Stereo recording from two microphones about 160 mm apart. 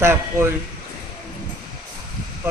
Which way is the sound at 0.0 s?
15° right (ahead or behind).